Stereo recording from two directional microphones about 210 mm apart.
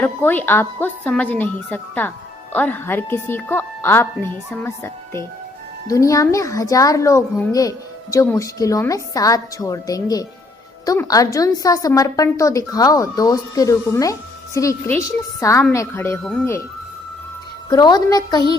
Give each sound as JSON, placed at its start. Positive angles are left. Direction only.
{"t": 0.0, "sound": "a woman's voice", "side_deg": 10}
{"t": 17.7, "sound": "speech", "side_deg": 20}